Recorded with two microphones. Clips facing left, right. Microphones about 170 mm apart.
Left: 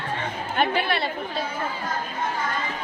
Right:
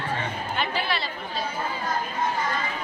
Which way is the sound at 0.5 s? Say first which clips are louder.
Left 6 dB; 55° left (ahead or behind).